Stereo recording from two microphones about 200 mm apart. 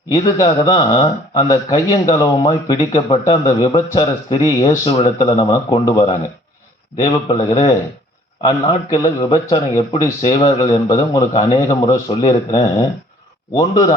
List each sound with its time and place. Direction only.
0.1 s a man's voice: 20° left (ahead or behind)
5.4 s a man's voice: 20° left (ahead or behind)
7.5 s a man's voice: 30° left (ahead or behind)
8.4 s a man's voice: 20° left (ahead or behind)